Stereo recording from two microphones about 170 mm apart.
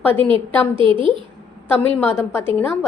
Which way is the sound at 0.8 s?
30° right (ahead or behind).